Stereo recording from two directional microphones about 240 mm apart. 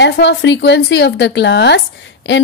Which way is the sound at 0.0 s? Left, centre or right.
Left.